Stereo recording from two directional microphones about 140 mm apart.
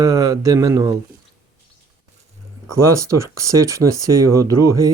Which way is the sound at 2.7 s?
20° right (ahead or behind).